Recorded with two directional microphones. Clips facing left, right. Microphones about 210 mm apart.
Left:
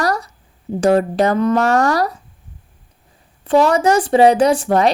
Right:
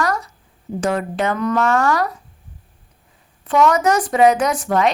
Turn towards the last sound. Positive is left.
turn(degrees=35)  # may be behind; listen again after turning